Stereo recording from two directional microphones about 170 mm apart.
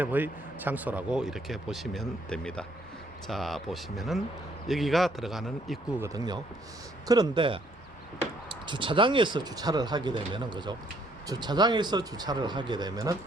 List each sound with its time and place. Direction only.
0.0 s speech: 10° right (ahead or behind)
6.0 s speech: 25° right (ahead or behind)
8.6 s speech: 30° right (ahead or behind)